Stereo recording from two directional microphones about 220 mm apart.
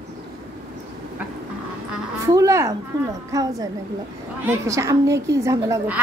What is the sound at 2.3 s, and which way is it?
A woman's voice, 15° right (ahead or behind).